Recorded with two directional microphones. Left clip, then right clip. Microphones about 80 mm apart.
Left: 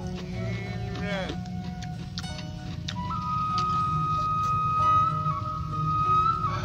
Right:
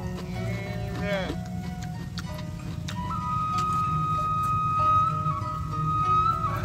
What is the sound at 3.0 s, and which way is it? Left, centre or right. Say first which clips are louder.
Vehicle: even; centre.